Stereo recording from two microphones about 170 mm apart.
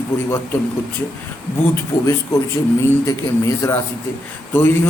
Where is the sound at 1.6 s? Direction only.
15° left (ahead or behind).